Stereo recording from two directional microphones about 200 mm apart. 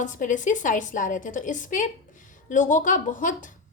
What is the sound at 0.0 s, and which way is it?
A woman's voice, 40° left (ahead or behind).